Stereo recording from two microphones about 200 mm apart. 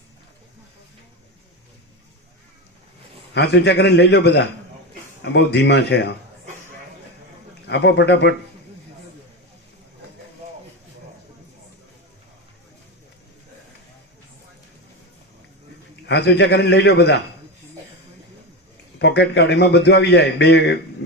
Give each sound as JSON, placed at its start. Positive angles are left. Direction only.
{"t": 3.3, "sound": "a man's voice", "side_deg": 55}
{"t": 7.7, "sound": "a man's voice", "side_deg": 60}
{"t": 16.0, "sound": "a man's voice", "side_deg": 55}
{"t": 18.9, "sound": "a man's voice", "side_deg": 60}